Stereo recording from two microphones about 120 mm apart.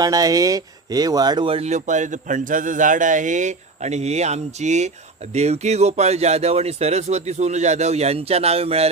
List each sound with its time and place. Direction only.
0.0 s speech: 30° right (ahead or behind)
1.5 s a man's voice: 70° right (ahead or behind)